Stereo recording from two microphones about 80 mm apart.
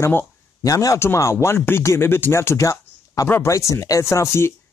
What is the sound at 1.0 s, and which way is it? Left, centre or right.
Speech, left.